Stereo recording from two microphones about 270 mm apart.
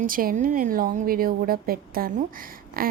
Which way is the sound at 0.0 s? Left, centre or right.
Right.